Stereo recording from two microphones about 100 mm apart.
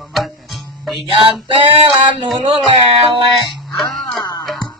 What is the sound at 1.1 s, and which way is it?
Male singing, 55° right (ahead or behind).